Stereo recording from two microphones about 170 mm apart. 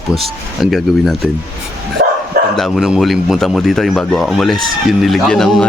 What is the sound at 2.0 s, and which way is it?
Bow-wow, 65° right (ahead or behind).